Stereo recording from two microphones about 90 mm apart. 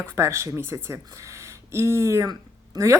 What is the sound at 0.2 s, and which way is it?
Speech, 30° right (ahead or behind).